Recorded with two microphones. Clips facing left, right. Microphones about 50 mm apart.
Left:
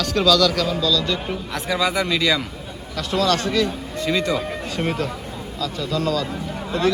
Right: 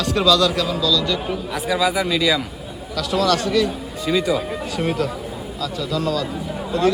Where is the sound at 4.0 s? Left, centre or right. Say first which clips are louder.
Right 2 dB; centre.